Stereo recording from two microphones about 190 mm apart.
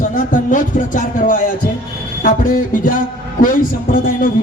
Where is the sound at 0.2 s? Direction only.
40° left (ahead or behind).